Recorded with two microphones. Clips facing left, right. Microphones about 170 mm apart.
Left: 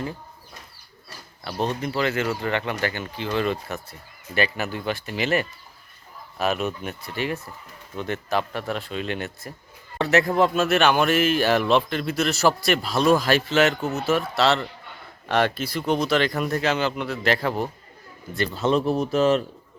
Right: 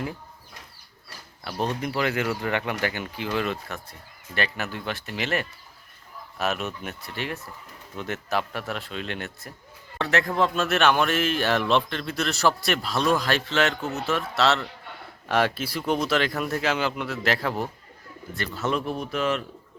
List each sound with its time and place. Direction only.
1.6 s speech: 10° right (ahead or behind)
18.3 s speech: 25° left (ahead or behind)